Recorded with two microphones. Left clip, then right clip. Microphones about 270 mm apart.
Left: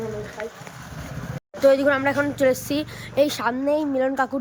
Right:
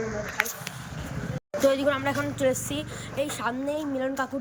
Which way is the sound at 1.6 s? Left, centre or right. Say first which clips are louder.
Left 6 dB; centre.